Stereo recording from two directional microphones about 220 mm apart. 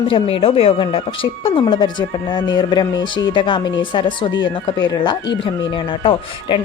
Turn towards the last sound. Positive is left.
turn(degrees=25)  # may be behind; listen again after turning